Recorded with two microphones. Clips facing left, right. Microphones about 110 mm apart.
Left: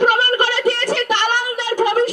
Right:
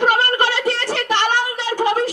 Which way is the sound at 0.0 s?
15° left (ahead or behind).